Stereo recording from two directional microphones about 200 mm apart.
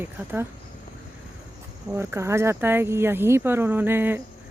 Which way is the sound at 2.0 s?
15° right (ahead or behind).